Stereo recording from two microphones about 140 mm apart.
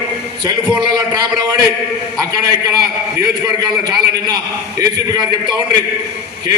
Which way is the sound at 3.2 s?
30° right (ahead or behind).